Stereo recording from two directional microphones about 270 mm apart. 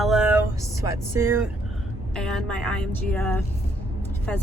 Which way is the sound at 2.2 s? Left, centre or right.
Centre.